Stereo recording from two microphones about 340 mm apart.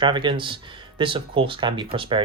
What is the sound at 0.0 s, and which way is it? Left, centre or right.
Speech, centre.